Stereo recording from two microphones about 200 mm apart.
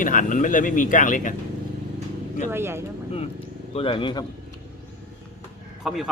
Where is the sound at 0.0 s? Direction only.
40° left (ahead or behind).